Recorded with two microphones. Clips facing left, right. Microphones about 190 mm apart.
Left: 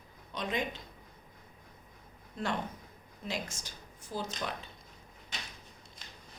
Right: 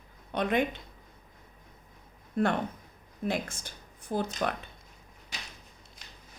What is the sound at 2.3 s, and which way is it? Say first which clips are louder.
Speech: right 7 dB; 55° right (ahead or behind).